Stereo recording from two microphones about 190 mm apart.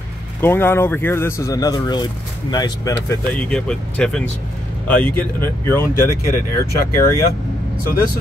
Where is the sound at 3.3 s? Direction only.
5° left (ahead or behind).